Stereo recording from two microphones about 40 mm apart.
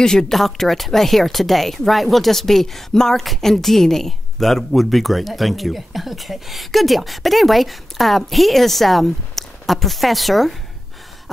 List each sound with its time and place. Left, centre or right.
0.0 s speech: centre
0.3 s speech: centre